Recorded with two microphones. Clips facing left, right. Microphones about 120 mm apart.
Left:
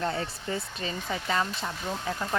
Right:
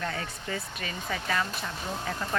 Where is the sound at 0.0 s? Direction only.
25° left (ahead or behind).